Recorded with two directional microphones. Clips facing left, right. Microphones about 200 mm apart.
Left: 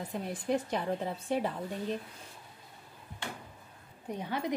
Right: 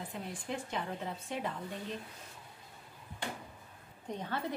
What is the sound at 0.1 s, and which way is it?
Speech, 40° left (ahead or behind).